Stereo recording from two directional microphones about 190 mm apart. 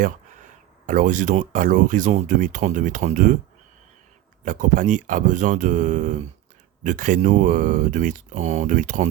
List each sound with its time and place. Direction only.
0.0 s speech: 45° right (ahead or behind)
4.4 s speech: 45° right (ahead or behind)